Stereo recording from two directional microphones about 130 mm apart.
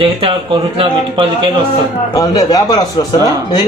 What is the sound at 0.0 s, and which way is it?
Speech, 45° right (ahead or behind).